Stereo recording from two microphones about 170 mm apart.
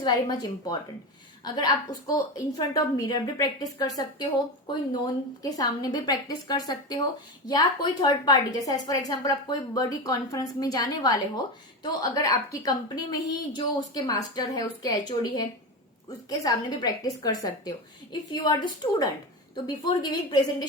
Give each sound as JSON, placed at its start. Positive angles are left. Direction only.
{"t": 0.0, "sound": "a woman's voice", "side_deg": 25}